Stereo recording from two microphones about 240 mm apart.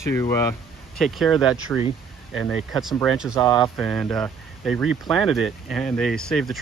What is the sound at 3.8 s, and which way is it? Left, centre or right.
Speech, centre.